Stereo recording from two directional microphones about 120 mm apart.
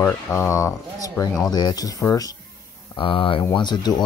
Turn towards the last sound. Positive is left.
turn(degrees=35)  # may be behind; listen again after turning